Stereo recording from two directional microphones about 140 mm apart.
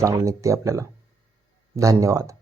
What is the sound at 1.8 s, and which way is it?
Speech, 25° right (ahead or behind).